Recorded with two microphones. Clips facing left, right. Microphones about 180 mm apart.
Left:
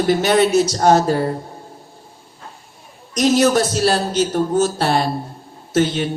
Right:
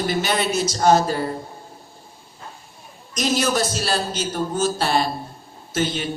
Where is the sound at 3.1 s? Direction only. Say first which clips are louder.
Left 7 dB; 70° left (ahead or behind).